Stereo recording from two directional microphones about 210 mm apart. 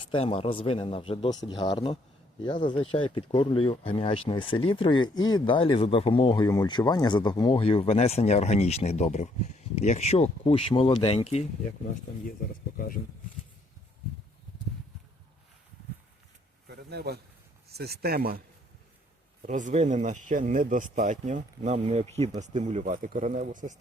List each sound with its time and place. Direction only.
0.0 s speech: 25° left (ahead or behind)
16.6 s a sound: 50° right (ahead or behind)
17.7 s speech: 50° right (ahead or behind)
19.5 s speech: 35° right (ahead or behind)